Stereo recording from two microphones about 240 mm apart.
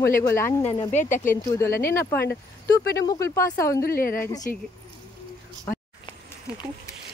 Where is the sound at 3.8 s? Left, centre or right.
Left.